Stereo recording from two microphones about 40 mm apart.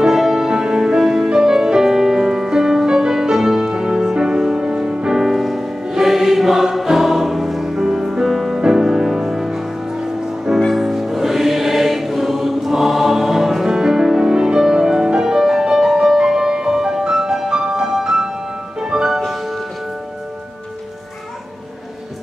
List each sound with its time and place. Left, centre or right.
0.0 s music: centre
8.5 s music: centre
10.7 s music: centre; by 19.0 s right
19.0 s music: centre